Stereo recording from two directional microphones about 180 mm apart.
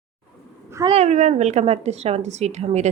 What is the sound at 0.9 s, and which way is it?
Speech, 40° right (ahead or behind).